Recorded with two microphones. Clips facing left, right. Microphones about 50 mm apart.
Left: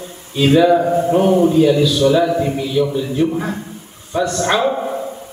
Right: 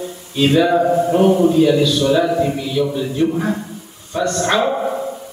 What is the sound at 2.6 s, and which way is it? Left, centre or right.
A man's voice, centre.